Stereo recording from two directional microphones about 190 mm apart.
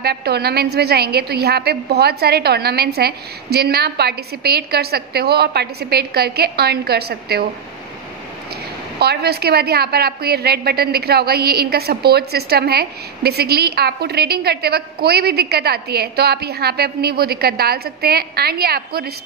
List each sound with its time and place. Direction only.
0.0 s a woman's voice: 60° right (ahead or behind)
9.0 s a woman's voice: 55° right (ahead or behind)